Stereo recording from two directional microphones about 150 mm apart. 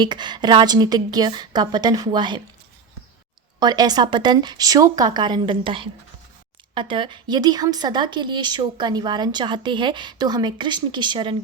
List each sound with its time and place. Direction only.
0.0 s a woman's voice: 30° right (ahead or behind)
3.6 s a woman's voice: 25° right (ahead or behind)